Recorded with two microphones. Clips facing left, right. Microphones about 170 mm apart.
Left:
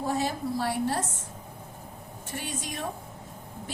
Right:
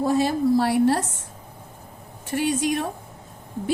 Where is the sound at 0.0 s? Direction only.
80° right.